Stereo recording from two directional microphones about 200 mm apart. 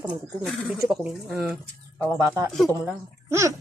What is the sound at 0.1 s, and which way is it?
Speech, centre (ahead or behind).